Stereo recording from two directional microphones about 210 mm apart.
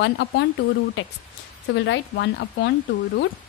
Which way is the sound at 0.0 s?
55° left (ahead or behind).